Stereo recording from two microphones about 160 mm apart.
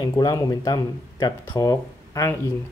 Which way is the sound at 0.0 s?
25° left (ahead or behind).